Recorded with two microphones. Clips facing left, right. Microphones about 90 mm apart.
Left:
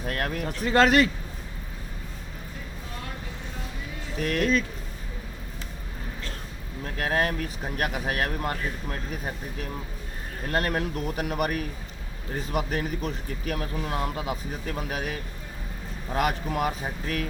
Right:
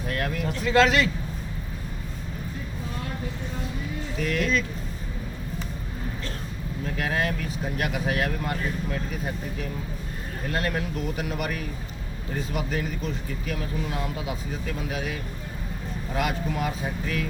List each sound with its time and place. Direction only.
0.1 s speech: 45° left (ahead or behind)
4.2 s speech: 45° left (ahead or behind)
6.9 s speech: 40° left (ahead or behind)
10.5 s speech: 50° left (ahead or behind)